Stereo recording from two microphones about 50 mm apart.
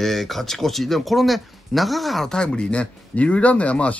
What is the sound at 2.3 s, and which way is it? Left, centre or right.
A man's voice, centre.